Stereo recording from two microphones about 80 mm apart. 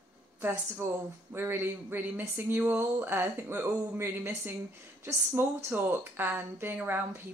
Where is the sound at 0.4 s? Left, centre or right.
Right.